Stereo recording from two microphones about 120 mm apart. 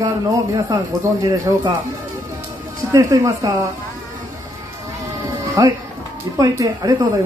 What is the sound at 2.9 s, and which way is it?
Speech, 25° right (ahead or behind).